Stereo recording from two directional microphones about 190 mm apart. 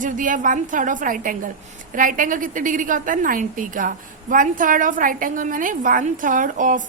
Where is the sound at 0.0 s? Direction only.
45° right (ahead or behind).